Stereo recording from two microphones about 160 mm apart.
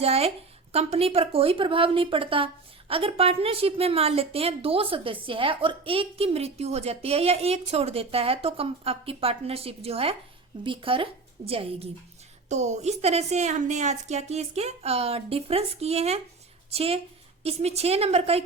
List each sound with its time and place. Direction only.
0.0 s a woman's voice: 40° right (ahead or behind)